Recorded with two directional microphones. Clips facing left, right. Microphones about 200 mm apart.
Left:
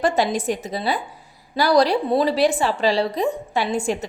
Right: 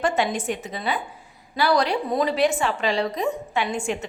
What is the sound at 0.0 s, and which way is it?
A woman's voice, 35° left (ahead or behind).